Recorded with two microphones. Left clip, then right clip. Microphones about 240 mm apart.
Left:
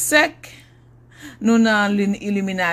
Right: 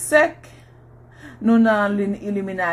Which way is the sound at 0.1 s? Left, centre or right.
Left.